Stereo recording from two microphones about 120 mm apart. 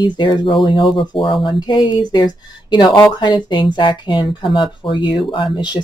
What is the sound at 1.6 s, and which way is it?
Speech, 35° left (ahead or behind).